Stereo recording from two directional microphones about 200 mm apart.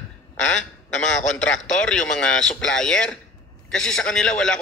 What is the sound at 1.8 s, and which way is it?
A man's voice, 5° left (ahead or behind).